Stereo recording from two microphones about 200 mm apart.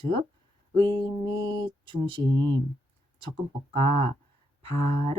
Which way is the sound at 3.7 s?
25° right (ahead or behind).